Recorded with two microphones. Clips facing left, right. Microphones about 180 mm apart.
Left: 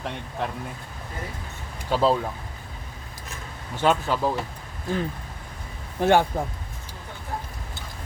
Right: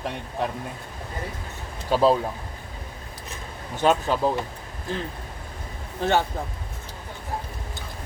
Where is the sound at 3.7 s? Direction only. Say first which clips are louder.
Right 1 dB; 15° right (ahead or behind).